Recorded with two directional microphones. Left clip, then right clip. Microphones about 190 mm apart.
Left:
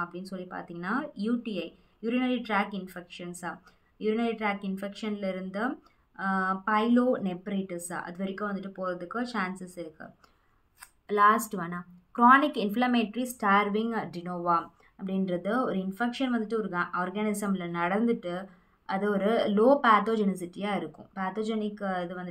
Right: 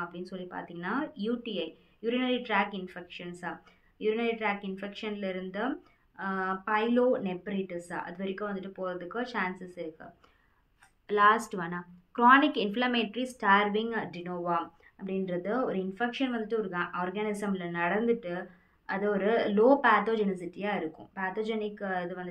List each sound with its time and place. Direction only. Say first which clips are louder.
0.0 s speech: left 2 dB; 40° left (ahead or behind)
11.1 s speech: left 1 dB; 35° left (ahead or behind)